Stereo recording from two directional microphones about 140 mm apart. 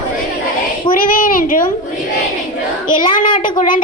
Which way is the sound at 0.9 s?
75° left (ahead or behind).